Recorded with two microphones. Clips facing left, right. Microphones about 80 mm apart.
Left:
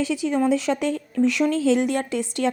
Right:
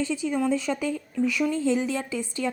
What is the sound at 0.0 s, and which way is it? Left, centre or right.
Speech, left.